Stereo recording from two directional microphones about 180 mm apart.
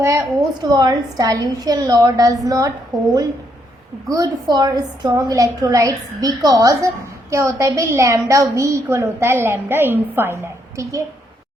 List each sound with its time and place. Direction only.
0.0 s a woman's voice: 15° right (ahead or behind)